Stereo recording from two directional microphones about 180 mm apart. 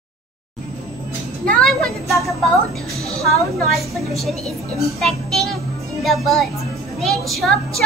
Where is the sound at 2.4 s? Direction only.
Centre (ahead or behind).